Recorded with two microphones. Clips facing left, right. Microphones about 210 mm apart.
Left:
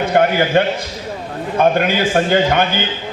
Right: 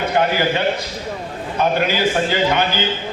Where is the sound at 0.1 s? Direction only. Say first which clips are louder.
Left 5 dB; 55° left (ahead or behind).